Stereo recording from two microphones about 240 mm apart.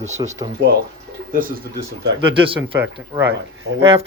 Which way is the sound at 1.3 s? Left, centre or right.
Right.